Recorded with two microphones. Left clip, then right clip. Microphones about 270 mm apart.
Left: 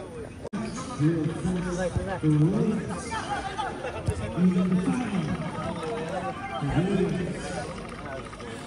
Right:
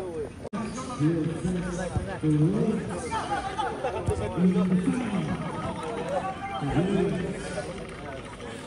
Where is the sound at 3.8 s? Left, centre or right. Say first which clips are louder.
Right 4 dB; right.